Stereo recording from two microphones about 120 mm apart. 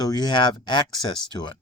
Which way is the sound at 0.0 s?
35° left (ahead or behind).